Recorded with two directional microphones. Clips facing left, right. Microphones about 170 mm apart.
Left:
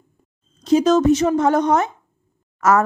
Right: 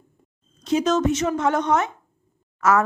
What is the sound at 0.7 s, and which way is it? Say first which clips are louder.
Speech: left 6 dB; 35° left (ahead or behind).